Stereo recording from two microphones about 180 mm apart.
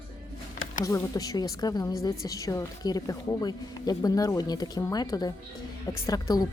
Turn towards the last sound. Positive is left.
turn(degrees=20)  # may be behind; listen again after turning